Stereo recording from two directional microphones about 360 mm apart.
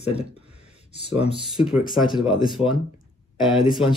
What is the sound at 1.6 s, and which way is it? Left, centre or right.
Speech, centre.